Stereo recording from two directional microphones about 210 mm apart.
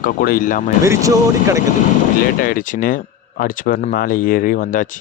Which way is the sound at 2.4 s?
40° left (ahead or behind).